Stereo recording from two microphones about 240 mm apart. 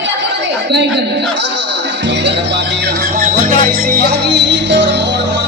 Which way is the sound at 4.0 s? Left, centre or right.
Right.